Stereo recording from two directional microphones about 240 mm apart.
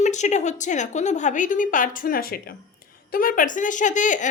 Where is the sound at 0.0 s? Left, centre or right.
Left.